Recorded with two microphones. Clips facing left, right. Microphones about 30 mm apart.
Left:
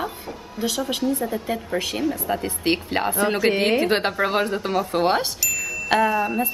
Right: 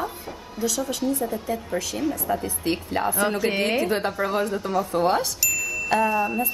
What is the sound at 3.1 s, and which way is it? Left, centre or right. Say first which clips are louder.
Speech: left 2 dB; centre.